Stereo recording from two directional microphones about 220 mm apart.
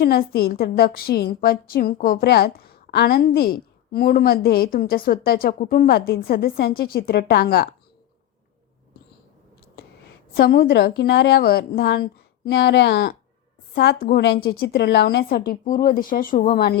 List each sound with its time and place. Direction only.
0.0 s a woman's voice: 45° left (ahead or behind)
10.3 s a woman's voice: 45° left (ahead or behind)